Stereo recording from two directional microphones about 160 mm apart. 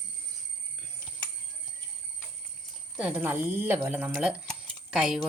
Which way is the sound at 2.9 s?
10° right (ahead or behind).